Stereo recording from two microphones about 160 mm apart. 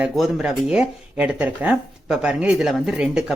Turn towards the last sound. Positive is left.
turn(degrees=-5)  # may be behind; listen again after turning